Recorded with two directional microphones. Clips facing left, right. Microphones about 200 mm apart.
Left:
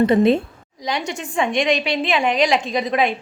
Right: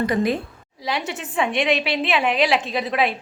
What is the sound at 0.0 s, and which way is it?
Speech, 25° left (ahead or behind).